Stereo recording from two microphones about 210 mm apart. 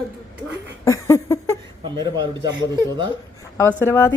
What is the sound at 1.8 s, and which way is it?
Speech, 20° right (ahead or behind).